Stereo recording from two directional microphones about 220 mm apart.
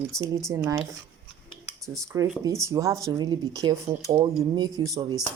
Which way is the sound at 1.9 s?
15° right (ahead or behind).